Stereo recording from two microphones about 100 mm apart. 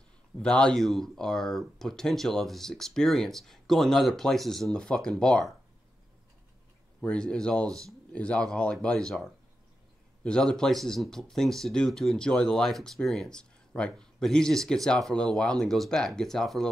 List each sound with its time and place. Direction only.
0.4 s speech: 10° left (ahead or behind)
7.0 s speech: 10° left (ahead or behind)
7.6 s speech: 35° right (ahead or behind)
8.1 s speech: 10° left (ahead or behind)